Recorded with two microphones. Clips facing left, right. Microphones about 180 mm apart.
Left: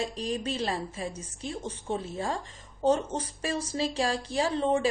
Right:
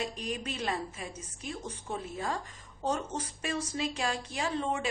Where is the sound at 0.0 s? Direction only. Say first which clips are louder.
Left 4 dB; 30° left (ahead or behind).